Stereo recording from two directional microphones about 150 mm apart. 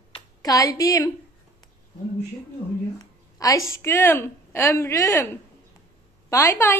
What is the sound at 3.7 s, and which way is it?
A woman's voice, 15° left (ahead or behind).